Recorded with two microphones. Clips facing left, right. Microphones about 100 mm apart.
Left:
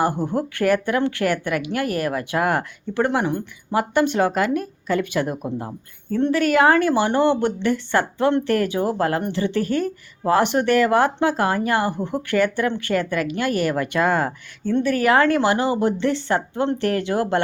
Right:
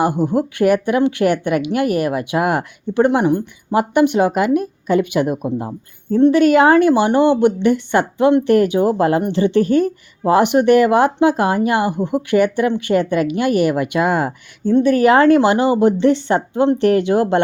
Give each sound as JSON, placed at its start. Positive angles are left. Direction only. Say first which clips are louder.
{"t": 0.0, "sound": "speech", "louder": "right 5 dB", "side_deg": -15}